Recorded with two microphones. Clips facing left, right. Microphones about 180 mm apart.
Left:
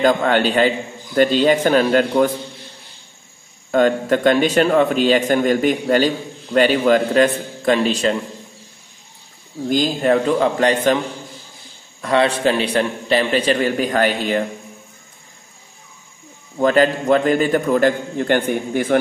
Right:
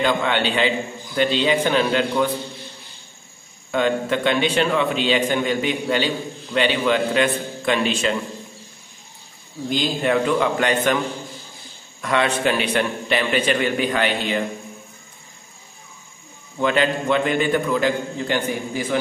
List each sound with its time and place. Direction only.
0.0 s a man's voice: 40° left (ahead or behind)
3.7 s a man's voice: 45° left (ahead or behind)
9.7 s a man's voice: 40° left (ahead or behind)
12.0 s a man's voice: 35° left (ahead or behind)
16.5 s a man's voice: 40° left (ahead or behind); by 18.9 s 55° left (ahead or behind)